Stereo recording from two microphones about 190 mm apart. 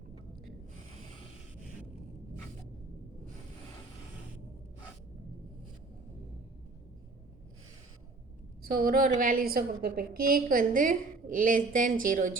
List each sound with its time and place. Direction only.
8.6 s a woman's voice: 50° right (ahead or behind)